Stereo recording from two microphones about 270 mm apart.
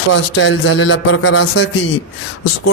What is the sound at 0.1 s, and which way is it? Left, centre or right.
A man's voice, left.